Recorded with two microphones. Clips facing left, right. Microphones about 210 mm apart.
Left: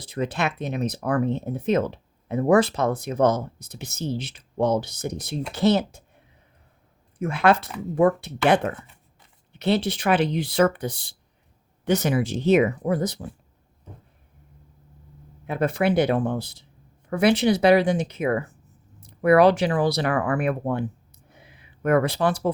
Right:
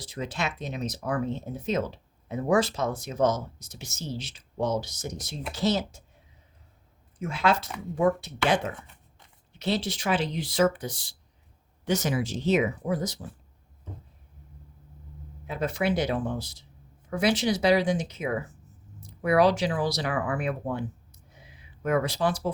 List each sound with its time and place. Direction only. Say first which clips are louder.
0.0 s speech: left 6 dB; 60° left (ahead or behind)
15.4 s speech: left 5 dB; 60° left (ahead or behind)
21.2 s a sound: left 2 dB; 60° left (ahead or behind)